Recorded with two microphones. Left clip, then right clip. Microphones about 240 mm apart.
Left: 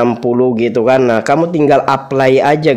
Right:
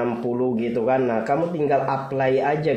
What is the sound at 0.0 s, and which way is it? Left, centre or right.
Speech, left.